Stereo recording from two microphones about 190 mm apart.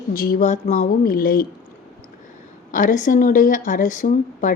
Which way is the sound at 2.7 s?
45° left (ahead or behind).